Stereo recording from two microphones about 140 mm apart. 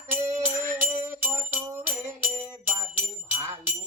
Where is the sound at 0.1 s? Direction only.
20° right (ahead or behind).